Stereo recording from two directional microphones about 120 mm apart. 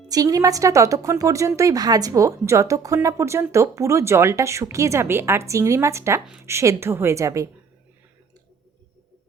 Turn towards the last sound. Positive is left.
turn(degrees=-25)  # may be behind; listen again after turning